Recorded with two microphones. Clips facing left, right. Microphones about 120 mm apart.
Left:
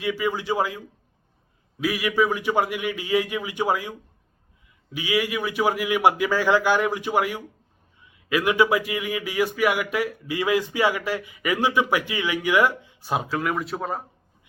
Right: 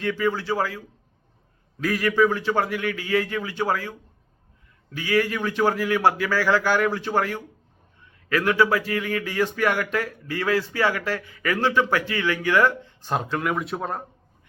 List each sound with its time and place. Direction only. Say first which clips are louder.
0.0 s speech: right 1 dB; 10° left (ahead or behind)